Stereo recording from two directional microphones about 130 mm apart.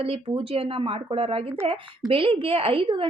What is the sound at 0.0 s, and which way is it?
A woman's voice, 45° right (ahead or behind).